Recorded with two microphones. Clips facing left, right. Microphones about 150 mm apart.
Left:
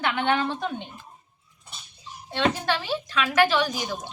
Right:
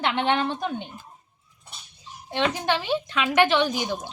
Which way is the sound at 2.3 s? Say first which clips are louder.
Even; 15° right (ahead or behind).